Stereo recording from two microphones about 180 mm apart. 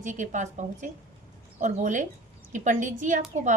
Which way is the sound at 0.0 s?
45° right (ahead or behind).